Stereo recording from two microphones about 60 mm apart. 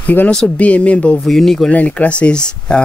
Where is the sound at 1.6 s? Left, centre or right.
Left.